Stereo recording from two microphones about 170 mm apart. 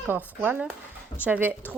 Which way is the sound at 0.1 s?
10° right (ahead or behind).